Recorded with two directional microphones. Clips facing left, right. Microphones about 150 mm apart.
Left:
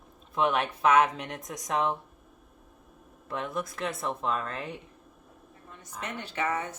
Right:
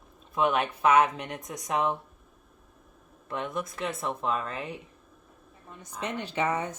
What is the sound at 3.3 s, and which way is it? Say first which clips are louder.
A woman's voice: even; centre (ahead or behind).